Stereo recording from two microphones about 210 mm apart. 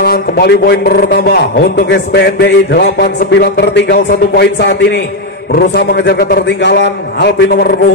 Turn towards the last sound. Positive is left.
turn(degrees=50)  # may be behind; listen again after turning